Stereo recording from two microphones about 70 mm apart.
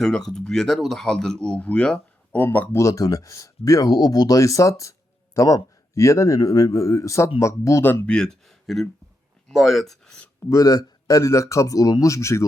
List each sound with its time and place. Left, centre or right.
0.0 s speech: centre
2.3 s speech: left
2.7 s speech: left
8.0 s speech: centre
10.5 s speech: left